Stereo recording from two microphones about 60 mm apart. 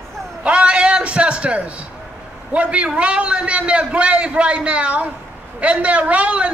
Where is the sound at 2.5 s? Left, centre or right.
Centre.